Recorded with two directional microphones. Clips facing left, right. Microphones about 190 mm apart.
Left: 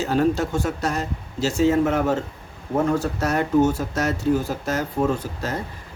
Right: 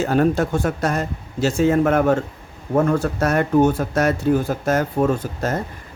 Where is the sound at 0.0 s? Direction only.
55° right (ahead or behind).